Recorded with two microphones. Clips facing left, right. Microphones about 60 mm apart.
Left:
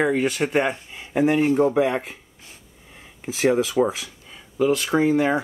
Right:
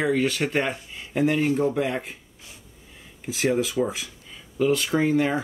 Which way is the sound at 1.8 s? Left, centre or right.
Centre.